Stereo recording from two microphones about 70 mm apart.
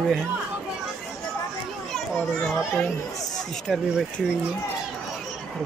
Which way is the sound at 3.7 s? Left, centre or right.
Centre.